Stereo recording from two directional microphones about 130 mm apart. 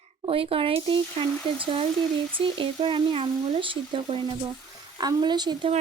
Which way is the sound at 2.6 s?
40° right (ahead or behind).